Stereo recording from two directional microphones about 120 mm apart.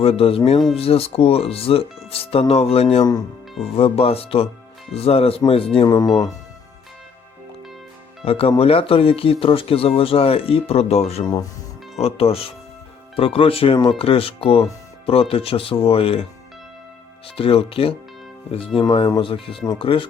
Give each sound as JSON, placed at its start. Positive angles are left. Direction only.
{"t": 0.0, "sound": "speech", "side_deg": 55}
{"t": 3.0, "sound": "speech", "side_deg": 35}
{"t": 3.6, "sound": "speech", "side_deg": 55}
{"t": 8.2, "sound": "speech", "side_deg": 55}
{"t": 11.2, "sound": "speech", "side_deg": 35}
{"t": 11.9, "sound": "speech", "side_deg": 55}
{"t": 17.2, "sound": "speech", "side_deg": 50}